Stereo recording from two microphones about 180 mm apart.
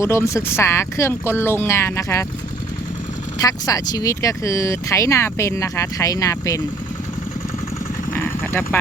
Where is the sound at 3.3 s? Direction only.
20° left (ahead or behind).